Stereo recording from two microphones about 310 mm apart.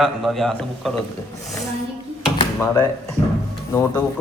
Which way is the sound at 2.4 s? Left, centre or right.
Centre.